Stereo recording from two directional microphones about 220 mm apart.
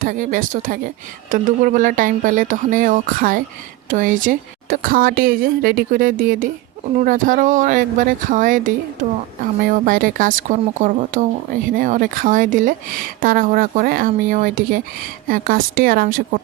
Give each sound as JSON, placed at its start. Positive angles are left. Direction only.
{"t": 0.0, "sound": "speech", "side_deg": -40}